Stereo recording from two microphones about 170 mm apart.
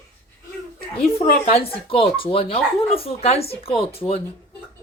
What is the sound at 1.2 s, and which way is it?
Speech, 35° left (ahead or behind).